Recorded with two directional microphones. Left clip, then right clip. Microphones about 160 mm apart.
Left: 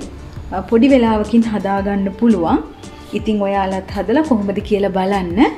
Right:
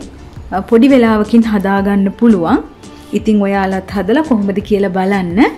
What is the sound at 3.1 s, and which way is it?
A woman's voice, 45° right (ahead or behind).